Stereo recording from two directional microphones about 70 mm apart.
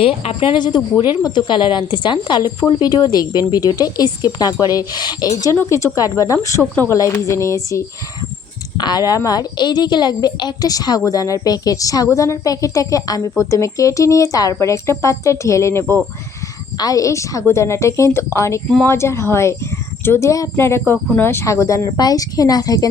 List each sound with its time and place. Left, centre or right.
0.6 s a woman's voice: left
5.5 s speech: left
8.8 s a woman's voice: left
16.7 s speech: left
20.6 s speech: left
21.4 s speech: left
21.8 s a woman's voice: left